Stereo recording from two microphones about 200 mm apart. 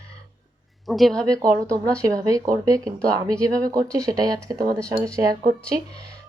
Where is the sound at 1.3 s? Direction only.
15° right (ahead or behind).